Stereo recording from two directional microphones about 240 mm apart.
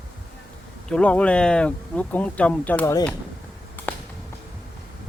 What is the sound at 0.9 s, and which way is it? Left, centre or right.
Speech, centre.